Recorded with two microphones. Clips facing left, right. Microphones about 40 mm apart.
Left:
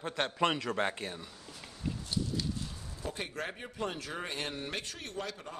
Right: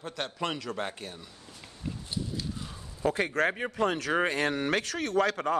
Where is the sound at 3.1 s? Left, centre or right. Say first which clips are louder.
Right 11 dB; right.